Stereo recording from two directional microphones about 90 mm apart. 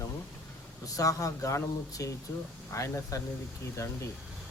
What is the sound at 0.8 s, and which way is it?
Speech, 40° left (ahead or behind).